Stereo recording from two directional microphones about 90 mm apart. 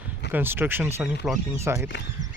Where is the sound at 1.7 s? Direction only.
25° right (ahead or behind).